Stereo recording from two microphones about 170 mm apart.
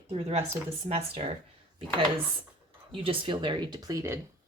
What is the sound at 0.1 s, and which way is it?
Speech, 35° right (ahead or behind).